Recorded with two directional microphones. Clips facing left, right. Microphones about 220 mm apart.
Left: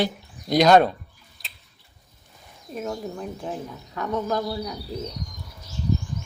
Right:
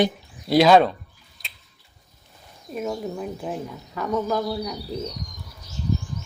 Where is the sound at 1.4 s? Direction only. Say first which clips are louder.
Right 1 dB; centre (ahead or behind).